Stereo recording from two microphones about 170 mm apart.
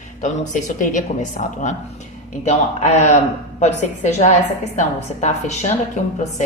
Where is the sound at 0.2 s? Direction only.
45° left (ahead or behind).